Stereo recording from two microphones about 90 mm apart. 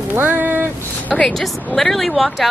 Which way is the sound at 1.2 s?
5° left (ahead or behind).